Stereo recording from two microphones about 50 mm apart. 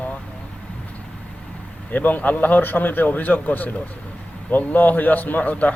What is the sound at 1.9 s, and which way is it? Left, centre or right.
A man's voice, left.